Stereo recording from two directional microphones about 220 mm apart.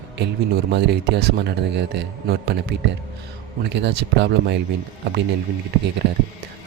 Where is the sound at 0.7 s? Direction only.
50° right (ahead or behind).